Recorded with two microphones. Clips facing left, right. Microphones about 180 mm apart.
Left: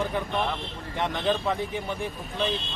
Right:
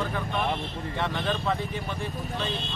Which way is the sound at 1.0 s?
15° left (ahead or behind).